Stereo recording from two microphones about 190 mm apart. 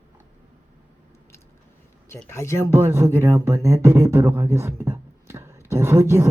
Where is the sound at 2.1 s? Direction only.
15° left (ahead or behind).